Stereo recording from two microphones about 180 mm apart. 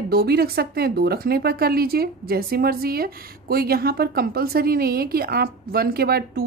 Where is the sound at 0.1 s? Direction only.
60° right (ahead or behind).